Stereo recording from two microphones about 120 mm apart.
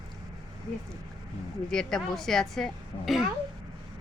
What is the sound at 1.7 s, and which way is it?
A woman's voice, 5° left (ahead or behind).